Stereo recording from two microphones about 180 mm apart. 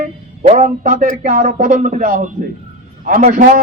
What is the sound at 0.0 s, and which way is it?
A man's voice, 45° right (ahead or behind).